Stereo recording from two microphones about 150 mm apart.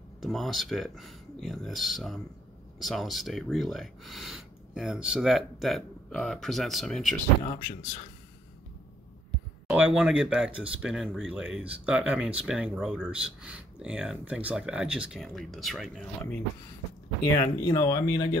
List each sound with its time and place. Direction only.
0.2 s speech: centre (ahead or behind)
7.4 s speech: 75° left (ahead or behind)
9.7 s speech: 5° right (ahead or behind)
17.6 s speech: 20° left (ahead or behind)